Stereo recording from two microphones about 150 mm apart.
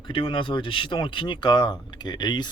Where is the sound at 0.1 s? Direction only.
35° left (ahead or behind).